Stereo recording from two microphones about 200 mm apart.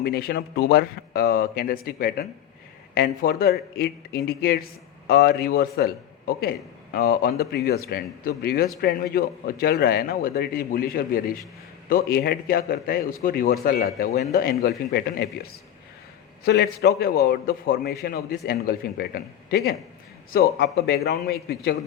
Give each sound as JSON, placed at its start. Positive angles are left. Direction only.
{"t": 0.0, "sound": "a man's voice", "side_deg": 50}
{"t": 16.4, "sound": "a man's voice", "side_deg": 55}